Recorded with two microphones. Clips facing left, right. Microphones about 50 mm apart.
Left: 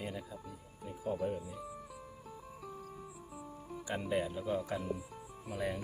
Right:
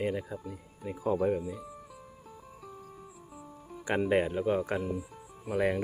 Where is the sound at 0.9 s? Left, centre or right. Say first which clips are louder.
Right 8 dB; right.